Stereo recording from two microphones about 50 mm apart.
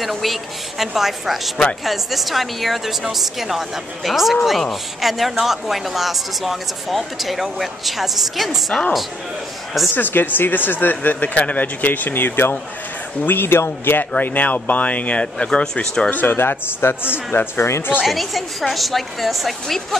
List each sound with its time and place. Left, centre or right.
0.0 s a woman's voice: centre
9.9 s speech: left
14.2 s speech: left; by 16.1 s centre
16.1 s speech: left
18.0 s a woman's voice: centre